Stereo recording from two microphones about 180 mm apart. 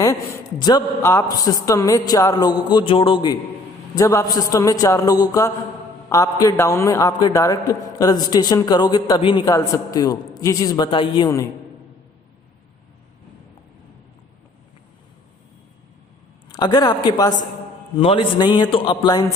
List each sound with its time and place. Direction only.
0.6 s a man's voice: 20° left (ahead or behind)
16.5 s a man's voice: 25° left (ahead or behind)